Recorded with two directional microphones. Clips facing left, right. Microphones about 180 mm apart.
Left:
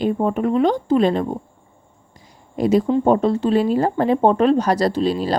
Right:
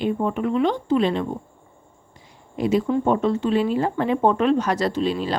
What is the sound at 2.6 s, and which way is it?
A woman's voice, 40° left (ahead or behind).